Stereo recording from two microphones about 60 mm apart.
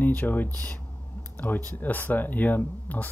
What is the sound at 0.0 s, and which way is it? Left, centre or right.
Speech, left.